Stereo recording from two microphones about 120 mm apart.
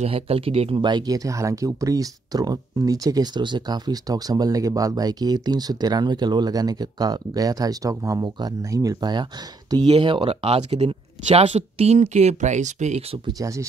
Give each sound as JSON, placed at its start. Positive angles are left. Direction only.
{"t": 0.0, "sound": "speech", "side_deg": -55}
{"t": 0.7, "sound": "speech", "side_deg": -35}
{"t": 13.3, "sound": "speech", "side_deg": -30}